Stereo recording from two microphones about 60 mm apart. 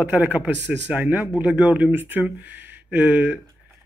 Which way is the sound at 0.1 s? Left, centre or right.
Right.